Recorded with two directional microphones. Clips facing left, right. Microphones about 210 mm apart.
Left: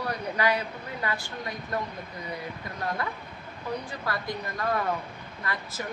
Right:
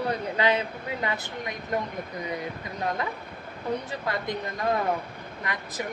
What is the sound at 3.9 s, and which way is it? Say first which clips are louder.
Speech: right 3 dB; 20° right (ahead or behind).